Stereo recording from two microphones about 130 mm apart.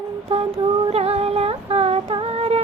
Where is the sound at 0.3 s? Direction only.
50° right (ahead or behind).